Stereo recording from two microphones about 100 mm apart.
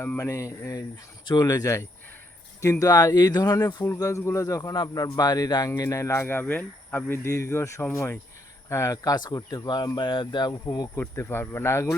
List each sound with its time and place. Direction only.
0.2 s speech: 30° left (ahead or behind)
9.1 s speech: 45° left (ahead or behind)
10.9 s speech: 25° left (ahead or behind)